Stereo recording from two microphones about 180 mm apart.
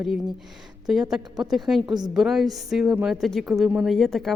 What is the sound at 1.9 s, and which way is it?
Speech, 25° right (ahead or behind).